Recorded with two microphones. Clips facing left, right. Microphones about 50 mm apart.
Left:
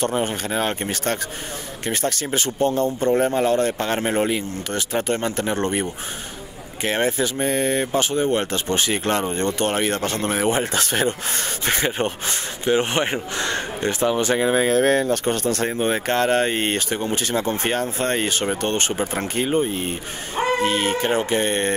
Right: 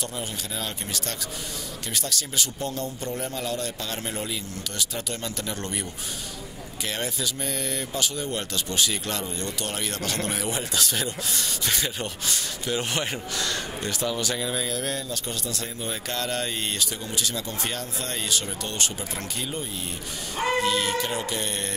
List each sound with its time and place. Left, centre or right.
0.0 s speech: left